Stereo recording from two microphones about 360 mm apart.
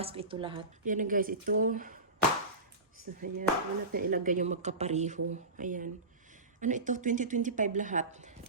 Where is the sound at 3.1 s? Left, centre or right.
Right.